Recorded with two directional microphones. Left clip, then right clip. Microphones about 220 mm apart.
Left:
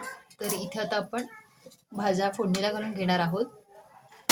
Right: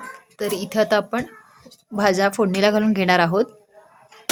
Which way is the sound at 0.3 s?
40° right (ahead or behind).